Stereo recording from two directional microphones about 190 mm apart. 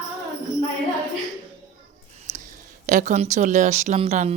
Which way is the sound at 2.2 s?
45° right (ahead or behind).